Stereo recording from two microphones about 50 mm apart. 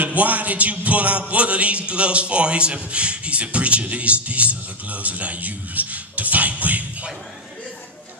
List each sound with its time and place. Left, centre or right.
0.0 s music: right